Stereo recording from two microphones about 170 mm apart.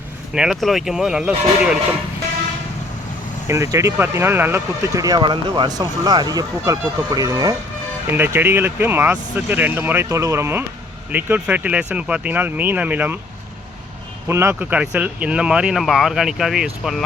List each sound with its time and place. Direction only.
0.3 s speech: centre (ahead or behind)
3.4 s speech: 15° right (ahead or behind)
8.1 s speech: 10° right (ahead or behind)
14.3 s speech: 15° right (ahead or behind)